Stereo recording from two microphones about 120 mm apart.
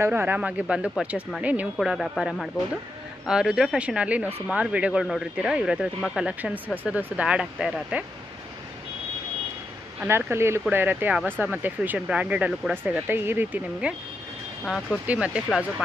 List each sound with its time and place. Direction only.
0.0 s speech: 15° right (ahead or behind)
10.0 s speech: 20° right (ahead or behind)
14.6 s speech: centre (ahead or behind)
15.0 s speech: 10° right (ahead or behind)